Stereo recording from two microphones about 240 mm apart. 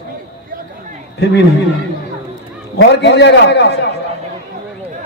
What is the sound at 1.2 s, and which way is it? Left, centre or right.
Speech, left.